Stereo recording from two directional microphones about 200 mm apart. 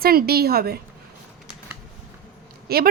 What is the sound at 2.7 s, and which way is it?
Speech, 50° right (ahead or behind).